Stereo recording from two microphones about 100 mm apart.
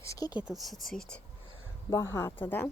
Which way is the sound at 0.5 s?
Centre (ahead or behind).